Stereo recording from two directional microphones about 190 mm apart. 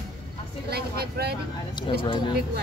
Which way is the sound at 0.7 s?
55° right (ahead or behind).